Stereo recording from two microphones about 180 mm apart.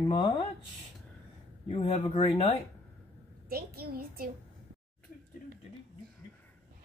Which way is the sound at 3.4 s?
55° right (ahead or behind).